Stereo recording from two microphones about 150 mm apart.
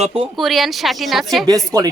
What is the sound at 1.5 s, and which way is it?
Speech, 25° right (ahead or behind).